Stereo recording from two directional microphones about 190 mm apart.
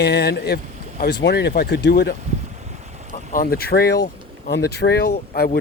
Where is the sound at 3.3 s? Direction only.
50° left (ahead or behind).